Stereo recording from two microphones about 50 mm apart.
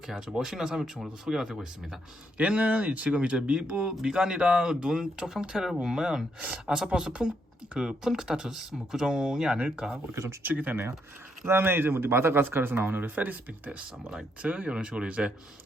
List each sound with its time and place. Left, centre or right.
0.1 s speech: centre
2.4 s speech: right
10.4 s speech: right
11.4 s speech: right
14.4 s speech: right
14.7 s speech: centre